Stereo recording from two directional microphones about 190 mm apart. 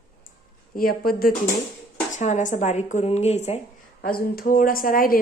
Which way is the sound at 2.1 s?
40° left (ahead or behind).